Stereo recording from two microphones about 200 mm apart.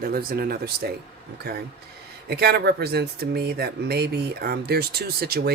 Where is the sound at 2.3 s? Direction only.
55° right (ahead or behind).